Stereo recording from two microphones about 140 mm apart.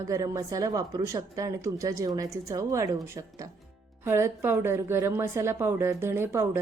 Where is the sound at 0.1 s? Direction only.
25° right (ahead or behind).